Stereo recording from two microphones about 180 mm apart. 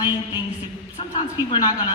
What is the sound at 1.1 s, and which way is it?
Speech, 25° left (ahead or behind).